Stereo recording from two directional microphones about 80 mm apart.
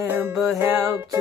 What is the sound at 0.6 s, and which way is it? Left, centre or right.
Music, right.